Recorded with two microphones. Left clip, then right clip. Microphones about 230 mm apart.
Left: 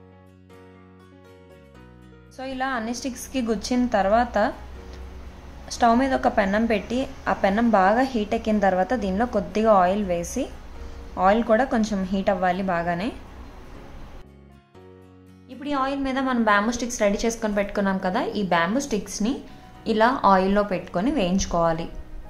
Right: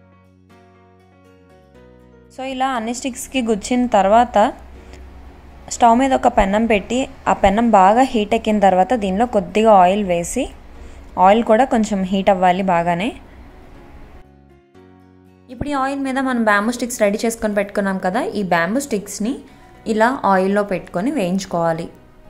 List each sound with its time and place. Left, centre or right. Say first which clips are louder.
2.3 s a woman's voice: right 7 dB; right
5.8 s a woman's voice: right 7 dB; centre
15.4 s a woman's voice: right 5 dB; right